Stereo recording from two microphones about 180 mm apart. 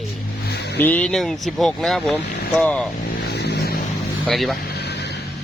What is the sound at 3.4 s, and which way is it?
Vehicle, 65° left (ahead or behind).